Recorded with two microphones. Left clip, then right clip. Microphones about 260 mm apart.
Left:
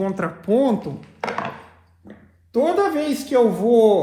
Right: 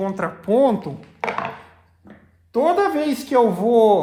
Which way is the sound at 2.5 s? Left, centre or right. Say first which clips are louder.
Right 1 dB; right.